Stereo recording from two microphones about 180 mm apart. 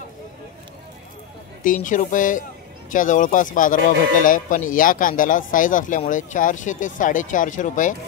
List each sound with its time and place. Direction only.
1.6 s speech: 45° left (ahead or behind)